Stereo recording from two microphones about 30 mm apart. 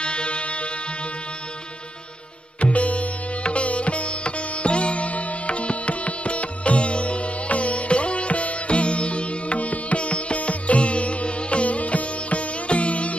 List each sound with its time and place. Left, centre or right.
0.0 s music: left
2.6 s sitar: left